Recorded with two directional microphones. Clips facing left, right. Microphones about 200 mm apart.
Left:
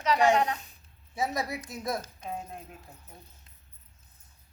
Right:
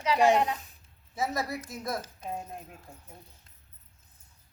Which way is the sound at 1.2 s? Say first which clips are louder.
Even; 15° left (ahead or behind).